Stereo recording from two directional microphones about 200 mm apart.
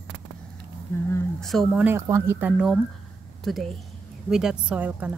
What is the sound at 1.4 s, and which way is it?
A woman's voice, centre (ahead or behind).